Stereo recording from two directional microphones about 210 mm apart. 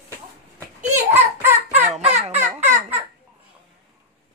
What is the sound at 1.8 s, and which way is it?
Fowl, 30° right (ahead or behind).